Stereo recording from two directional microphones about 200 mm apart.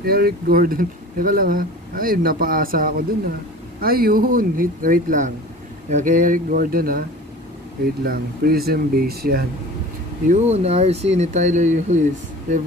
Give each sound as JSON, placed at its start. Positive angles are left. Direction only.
{"t": 0.0, "sound": "speech", "side_deg": -50}
{"t": 10.2, "sound": "speech", "side_deg": -35}